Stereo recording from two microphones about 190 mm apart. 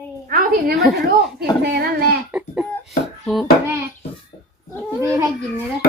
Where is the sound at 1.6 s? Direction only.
55° right (ahead or behind).